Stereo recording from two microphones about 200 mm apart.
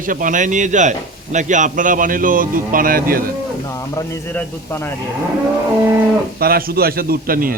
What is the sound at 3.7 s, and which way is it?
A man's voice, 15° left (ahead or behind).